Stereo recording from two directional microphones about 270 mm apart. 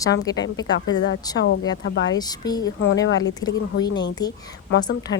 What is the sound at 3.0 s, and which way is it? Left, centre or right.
Speech, left.